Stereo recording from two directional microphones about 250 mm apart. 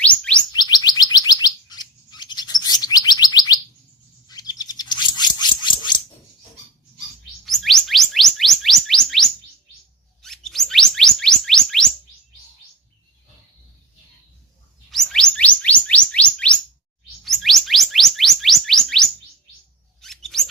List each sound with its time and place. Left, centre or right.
0.0 s chirp tone: centre
0.5 s chirp tone: centre
1.1 s chirp: centre
4.3 s bird: centre
7.4 s chirp tone: centre
14.8 s chirp tone: centre
20.0 s chirp: centre